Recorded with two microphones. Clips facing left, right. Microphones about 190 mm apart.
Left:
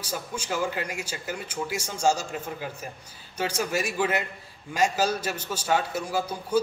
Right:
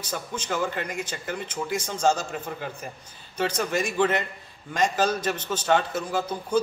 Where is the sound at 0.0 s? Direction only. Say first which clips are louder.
Right 1 dB; 10° left (ahead or behind).